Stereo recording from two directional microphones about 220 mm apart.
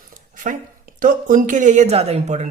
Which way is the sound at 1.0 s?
40° right (ahead or behind).